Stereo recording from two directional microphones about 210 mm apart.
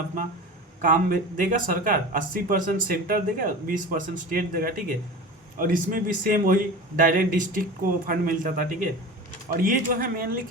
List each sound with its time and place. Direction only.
0.8 s speech: 40° right (ahead or behind)